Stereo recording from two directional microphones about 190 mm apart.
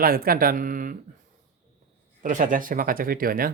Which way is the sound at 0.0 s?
50° right (ahead or behind).